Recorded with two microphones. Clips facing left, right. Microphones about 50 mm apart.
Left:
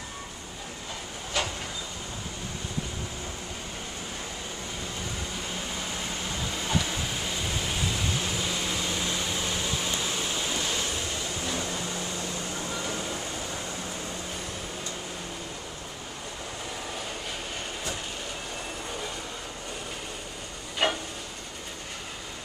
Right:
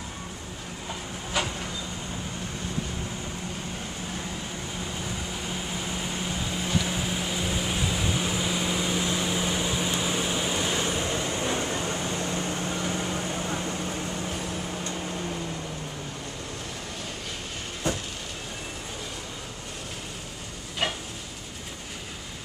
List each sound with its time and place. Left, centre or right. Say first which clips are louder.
1.3 s vehicle: right 1 dB; centre
6.8 s vehicle: right 2 dB; centre; by 13.7 s right
20.8 s a sound: left 3 dB; centre